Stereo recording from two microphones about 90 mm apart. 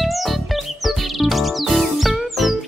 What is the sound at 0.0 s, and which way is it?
Music, centre (ahead or behind).